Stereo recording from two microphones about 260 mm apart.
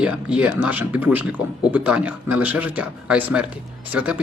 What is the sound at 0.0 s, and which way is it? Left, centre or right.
Speech, centre.